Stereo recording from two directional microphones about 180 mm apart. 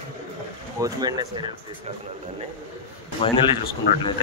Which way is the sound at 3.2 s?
30° left (ahead or behind).